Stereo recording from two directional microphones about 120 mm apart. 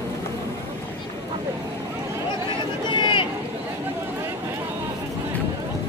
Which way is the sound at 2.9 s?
40° left (ahead or behind).